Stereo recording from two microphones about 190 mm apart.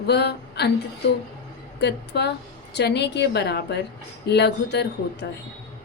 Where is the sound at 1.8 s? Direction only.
60° left (ahead or behind).